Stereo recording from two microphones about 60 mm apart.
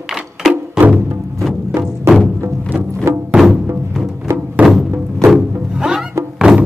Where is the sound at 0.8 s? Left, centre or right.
Centre.